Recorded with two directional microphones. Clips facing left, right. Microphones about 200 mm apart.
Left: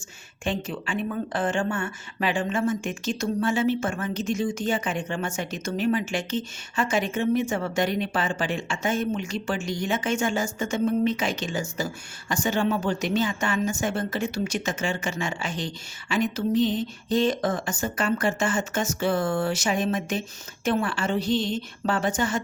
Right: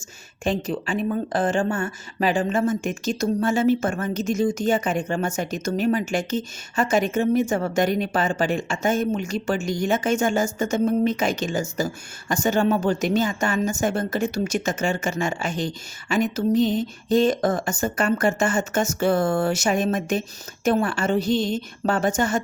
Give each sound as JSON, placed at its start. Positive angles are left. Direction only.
{"t": 0.4, "sound": "a woman's voice", "side_deg": -40}